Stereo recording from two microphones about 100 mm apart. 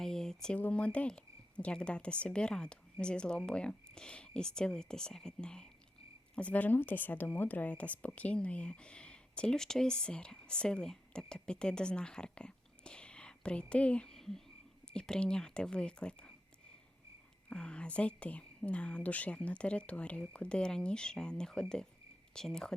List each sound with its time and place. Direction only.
0.0 s a sound: 5° left (ahead or behind)
0.6 s speech: 10° left (ahead or behind)
17.5 s speech: 10° left (ahead or behind)